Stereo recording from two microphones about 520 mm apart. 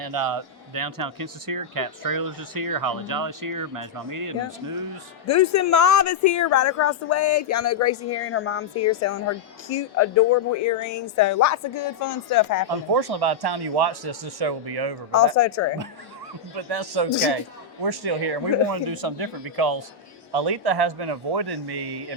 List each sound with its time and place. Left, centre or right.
0.0 s speech: right
5.2 s speech: left
12.9 s speech: right
15.4 s speech: left
16.6 s speech: right